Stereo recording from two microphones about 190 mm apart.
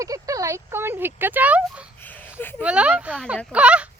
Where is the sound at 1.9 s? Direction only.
10° left (ahead or behind).